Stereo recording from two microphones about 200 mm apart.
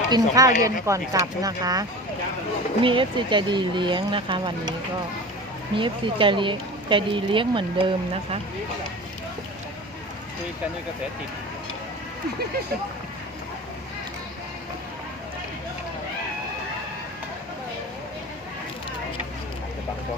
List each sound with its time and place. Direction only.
0.1 s speech: 15° right (ahead or behind)
5.7 s speech: 25° right (ahead or behind)